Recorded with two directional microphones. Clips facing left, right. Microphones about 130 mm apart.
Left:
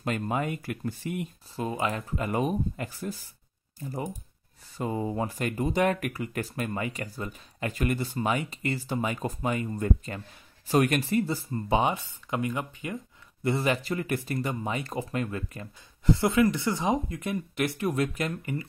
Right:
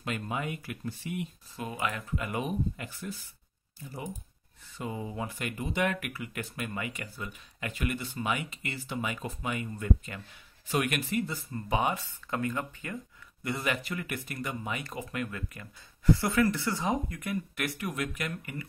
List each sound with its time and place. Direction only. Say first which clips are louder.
0.0 s speech: left 5 dB; 45° left (ahead or behind)
1.6 s speech: left 5 dB; 30° left (ahead or behind)
4.7 s speech: left 6 dB; 40° left (ahead or behind); by 13.5 s 20° left (ahead or behind)
13.5 s speech: left 6 dB; 30° left (ahead or behind)